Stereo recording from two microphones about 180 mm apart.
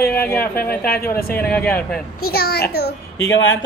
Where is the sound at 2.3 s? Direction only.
60° left (ahead or behind).